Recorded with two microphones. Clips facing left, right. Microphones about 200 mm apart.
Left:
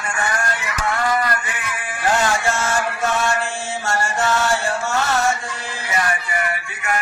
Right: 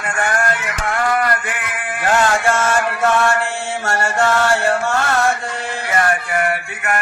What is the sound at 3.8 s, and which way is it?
Mantra, 60° right (ahead or behind).